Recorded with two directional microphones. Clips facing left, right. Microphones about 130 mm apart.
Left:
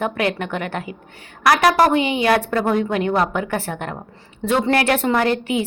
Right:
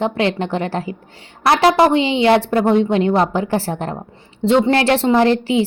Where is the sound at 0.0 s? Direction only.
30° right (ahead or behind).